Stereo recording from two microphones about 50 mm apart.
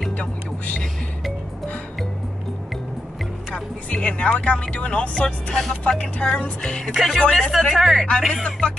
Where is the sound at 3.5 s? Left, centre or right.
Left.